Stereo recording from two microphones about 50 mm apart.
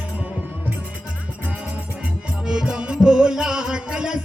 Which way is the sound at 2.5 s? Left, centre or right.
Centre.